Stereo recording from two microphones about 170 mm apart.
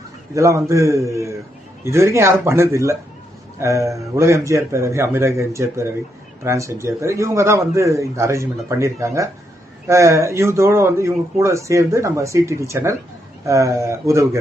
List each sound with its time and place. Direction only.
0.3 s speech: 20° right (ahead or behind)